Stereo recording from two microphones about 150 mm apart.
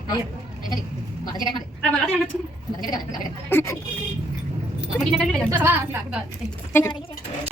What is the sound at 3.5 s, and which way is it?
Speech, 15° left (ahead or behind).